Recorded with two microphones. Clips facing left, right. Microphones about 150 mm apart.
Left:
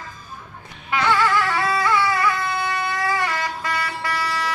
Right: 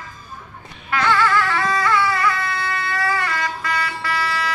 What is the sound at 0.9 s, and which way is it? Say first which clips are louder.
Music: right 1 dB; 15° left (ahead or behind).